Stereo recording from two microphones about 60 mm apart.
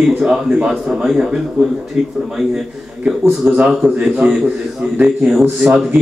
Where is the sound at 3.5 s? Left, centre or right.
Right.